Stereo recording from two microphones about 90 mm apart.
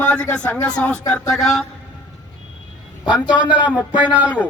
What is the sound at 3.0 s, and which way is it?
A man's voice, 10° right (ahead or behind).